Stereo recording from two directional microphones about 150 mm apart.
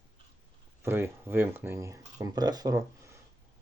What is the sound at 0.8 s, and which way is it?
Speech, 15° right (ahead or behind).